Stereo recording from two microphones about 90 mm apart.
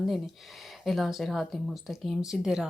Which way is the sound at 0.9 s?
Centre (ahead or behind).